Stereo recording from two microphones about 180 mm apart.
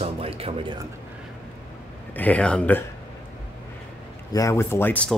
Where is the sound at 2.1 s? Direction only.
10° left (ahead or behind).